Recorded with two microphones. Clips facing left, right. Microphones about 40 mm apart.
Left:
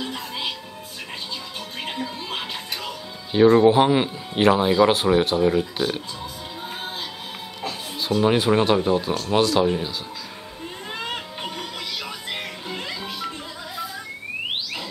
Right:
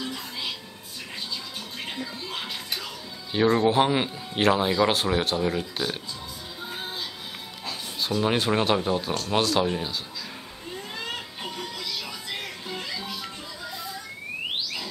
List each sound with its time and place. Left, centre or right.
0.0 s music: left
3.3 s speech: centre
8.2 s speech: centre
11.5 s music: left